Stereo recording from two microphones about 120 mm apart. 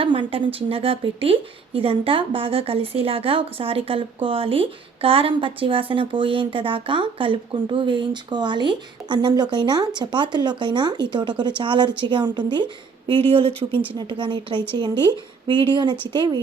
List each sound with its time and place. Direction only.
0.0 s a woman's voice: 50° right (ahead or behind)
13.7 s speech: 40° right (ahead or behind)